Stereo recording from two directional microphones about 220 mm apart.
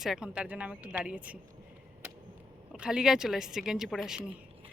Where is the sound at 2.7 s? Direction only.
5° right (ahead or behind).